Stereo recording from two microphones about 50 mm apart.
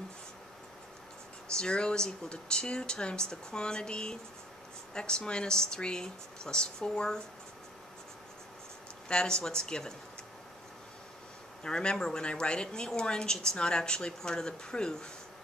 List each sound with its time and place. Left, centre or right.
1.6 s speech: centre
9.1 s speech: centre
11.6 s speech: centre